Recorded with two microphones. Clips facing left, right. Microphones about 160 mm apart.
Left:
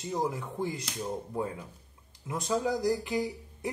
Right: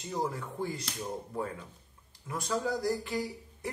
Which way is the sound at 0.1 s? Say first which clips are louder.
Left 2 dB; 20° left (ahead or behind).